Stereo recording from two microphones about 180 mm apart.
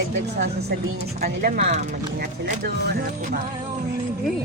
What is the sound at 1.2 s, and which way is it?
Speech, 60° right (ahead or behind).